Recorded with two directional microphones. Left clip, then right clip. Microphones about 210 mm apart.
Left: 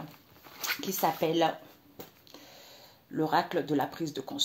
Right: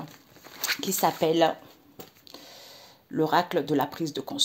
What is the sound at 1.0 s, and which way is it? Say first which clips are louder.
Speech: right 4 dB; 45° right (ahead or behind).